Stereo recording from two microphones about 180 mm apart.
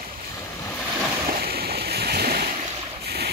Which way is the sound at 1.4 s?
60° right (ahead or behind).